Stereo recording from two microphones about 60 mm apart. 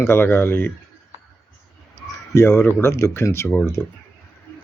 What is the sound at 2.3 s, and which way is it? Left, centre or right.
Speech, left.